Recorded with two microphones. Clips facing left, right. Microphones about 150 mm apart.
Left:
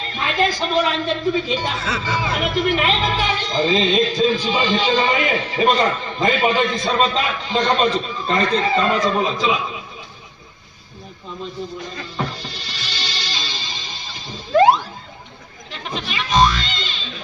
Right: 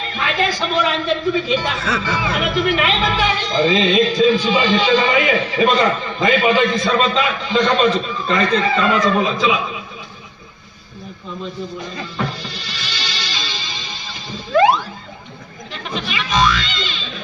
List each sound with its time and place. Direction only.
0.1 s a man's voice: 40° left (ahead or behind)
12.1 s music: 40° left (ahead or behind)
14.5 s a man's voice: 40° left (ahead or behind)
16.0 s a man's voice: 40° left (ahead or behind)